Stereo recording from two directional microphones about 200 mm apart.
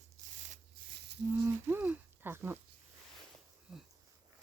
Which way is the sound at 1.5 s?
10° right (ahead or behind).